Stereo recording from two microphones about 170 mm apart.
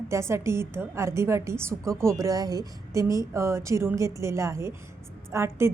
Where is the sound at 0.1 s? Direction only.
15° right (ahead or behind).